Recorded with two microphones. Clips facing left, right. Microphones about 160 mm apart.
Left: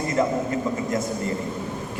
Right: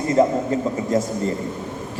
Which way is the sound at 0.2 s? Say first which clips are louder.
Right 5 dB; 30° right (ahead or behind).